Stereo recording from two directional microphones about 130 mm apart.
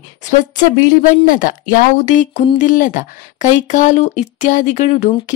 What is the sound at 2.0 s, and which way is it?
Speech, 70° left (ahead or behind).